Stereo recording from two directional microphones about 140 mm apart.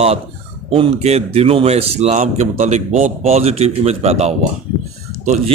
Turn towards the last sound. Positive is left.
turn(degrees=-55)  # may be behind; listen again after turning